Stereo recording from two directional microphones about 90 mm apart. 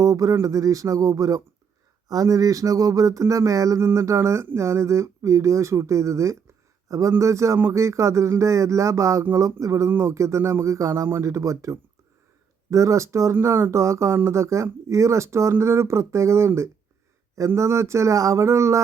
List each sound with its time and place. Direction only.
0.0 s speech: 40° right (ahead or behind)